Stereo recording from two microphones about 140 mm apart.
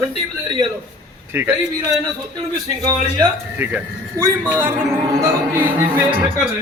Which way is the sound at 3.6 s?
15° right (ahead or behind).